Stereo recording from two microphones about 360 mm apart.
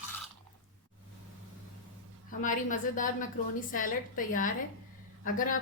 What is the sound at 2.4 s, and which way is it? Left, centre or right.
A woman's voice, left.